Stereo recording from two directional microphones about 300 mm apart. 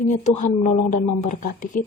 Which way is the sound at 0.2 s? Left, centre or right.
Left.